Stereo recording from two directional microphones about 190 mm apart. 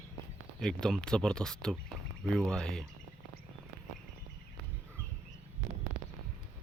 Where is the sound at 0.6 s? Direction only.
5° left (ahead or behind).